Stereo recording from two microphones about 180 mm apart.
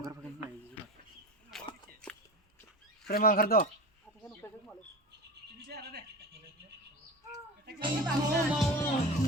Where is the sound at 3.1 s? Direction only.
55° left (ahead or behind).